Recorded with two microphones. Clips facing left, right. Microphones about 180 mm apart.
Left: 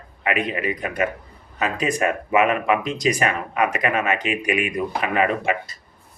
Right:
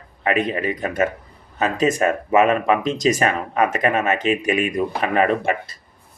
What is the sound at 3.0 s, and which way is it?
Speech, 40° right (ahead or behind).